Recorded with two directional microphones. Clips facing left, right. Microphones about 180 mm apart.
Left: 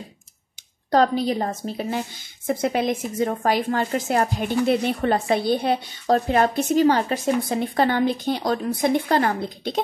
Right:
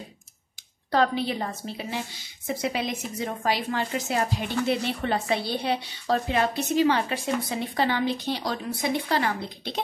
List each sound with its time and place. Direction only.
0.9 s a woman's voice: 40° left (ahead or behind)